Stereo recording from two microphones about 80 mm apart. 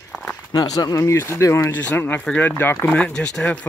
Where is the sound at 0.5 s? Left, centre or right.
Left.